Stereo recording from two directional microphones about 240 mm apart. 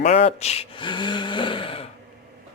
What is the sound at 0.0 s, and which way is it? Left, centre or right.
Speech, left.